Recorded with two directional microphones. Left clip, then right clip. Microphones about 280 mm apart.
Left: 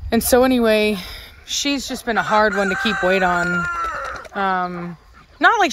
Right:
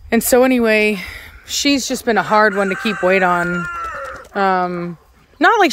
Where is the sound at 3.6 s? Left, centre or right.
Left.